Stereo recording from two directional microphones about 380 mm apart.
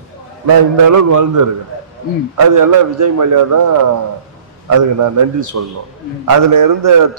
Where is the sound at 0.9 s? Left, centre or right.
Right.